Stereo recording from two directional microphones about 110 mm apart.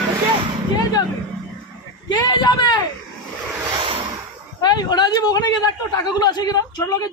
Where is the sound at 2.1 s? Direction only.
40° left (ahead or behind).